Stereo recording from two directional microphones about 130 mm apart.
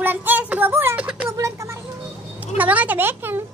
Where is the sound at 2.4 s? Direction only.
10° right (ahead or behind).